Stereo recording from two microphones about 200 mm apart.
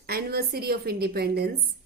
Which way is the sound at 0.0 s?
50° right (ahead or behind).